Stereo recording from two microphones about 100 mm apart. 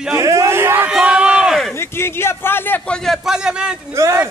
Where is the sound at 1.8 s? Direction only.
25° left (ahead or behind).